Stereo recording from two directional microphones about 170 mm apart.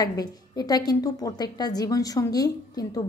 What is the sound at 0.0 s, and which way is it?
A woman's voice, 20° left (ahead or behind).